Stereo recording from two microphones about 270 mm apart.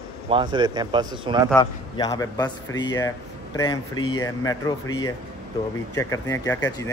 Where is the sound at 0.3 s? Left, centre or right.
Centre.